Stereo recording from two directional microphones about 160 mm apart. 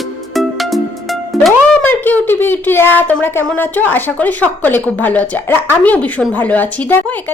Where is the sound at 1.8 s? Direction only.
10° left (ahead or behind).